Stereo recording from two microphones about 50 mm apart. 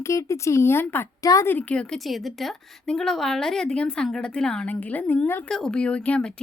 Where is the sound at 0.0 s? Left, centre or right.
Left.